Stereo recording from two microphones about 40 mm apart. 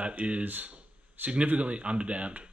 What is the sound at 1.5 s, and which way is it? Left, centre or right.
Speech, right.